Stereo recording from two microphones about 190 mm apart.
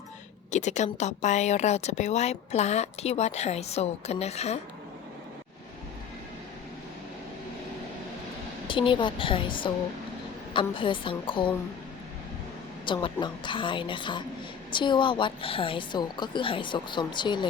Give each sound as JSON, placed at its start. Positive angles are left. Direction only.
{"t": 0.5, "sound": "a woman's voice", "side_deg": 40}
{"t": 8.6, "sound": "a woman's voice", "side_deg": 25}
{"t": 12.8, "sound": "a woman's voice", "side_deg": 25}